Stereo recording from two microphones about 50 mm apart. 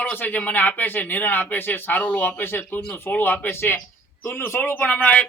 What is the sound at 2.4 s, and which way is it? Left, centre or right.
Speech, left.